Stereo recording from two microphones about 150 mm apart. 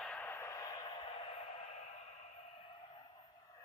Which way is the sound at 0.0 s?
10° left (ahead or behind).